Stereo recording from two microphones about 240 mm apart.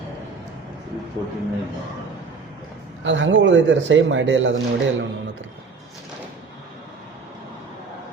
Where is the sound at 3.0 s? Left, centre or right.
Right.